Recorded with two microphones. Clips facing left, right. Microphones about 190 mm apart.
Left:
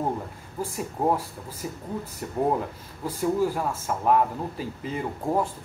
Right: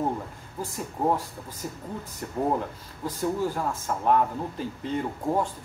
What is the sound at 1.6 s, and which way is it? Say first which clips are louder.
Speech: left 2 dB; 5° left (ahead or behind).